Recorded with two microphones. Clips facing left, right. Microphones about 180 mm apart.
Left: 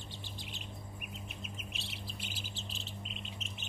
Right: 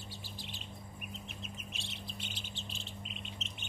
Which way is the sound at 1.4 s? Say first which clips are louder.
Even; 5° left (ahead or behind).